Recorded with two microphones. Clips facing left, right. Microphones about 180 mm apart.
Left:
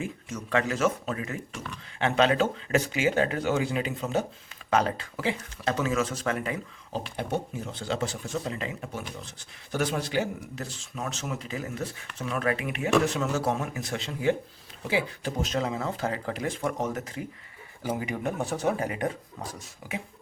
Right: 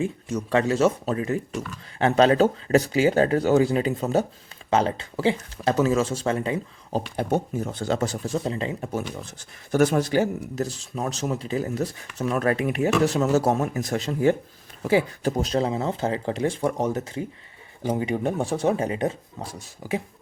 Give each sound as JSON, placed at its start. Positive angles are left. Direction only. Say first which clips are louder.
{"t": 0.0, "sound": "speech", "louder": "right 8 dB", "side_deg": -35}
{"t": 4.7, "sound": "speech", "louder": "right 3 dB", "side_deg": -25}
{"t": 7.2, "sound": "speech", "louder": "right 6 dB", "side_deg": -40}